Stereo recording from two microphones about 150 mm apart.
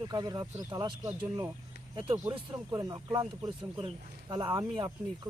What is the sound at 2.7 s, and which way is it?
Speech, 20° right (ahead or behind).